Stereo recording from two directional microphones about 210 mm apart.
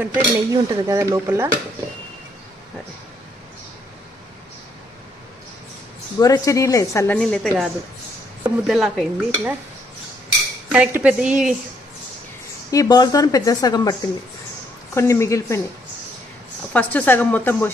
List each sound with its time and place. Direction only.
0.0 s dishes: 15° right (ahead or behind)
6.1 s speech: 15° left (ahead or behind)
7.2 s stir: 5° left (ahead or behind)
10.7 s stir: 5° right (ahead or behind)
12.7 s speech: 20° left (ahead or behind)
15.0 s speech: 15° left (ahead or behind)
16.7 s speech: 10° left (ahead or behind)